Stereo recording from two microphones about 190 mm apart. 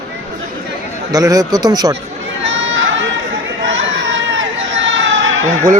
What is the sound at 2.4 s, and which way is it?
Crowd, 85° right.